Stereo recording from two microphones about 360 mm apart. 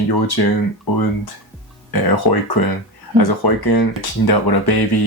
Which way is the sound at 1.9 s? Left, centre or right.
Left.